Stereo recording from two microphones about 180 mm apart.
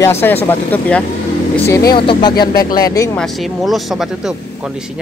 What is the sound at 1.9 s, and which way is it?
Speech, 30° left (ahead or behind).